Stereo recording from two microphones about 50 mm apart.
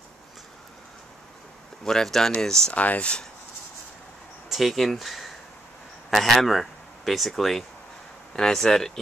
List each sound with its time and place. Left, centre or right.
1.9 s speech: centre
2.7 s speech: left
4.5 s speech: centre